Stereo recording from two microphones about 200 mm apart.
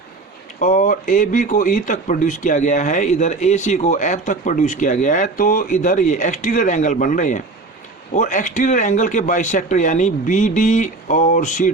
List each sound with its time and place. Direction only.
0.6 s speech: 40° left (ahead or behind)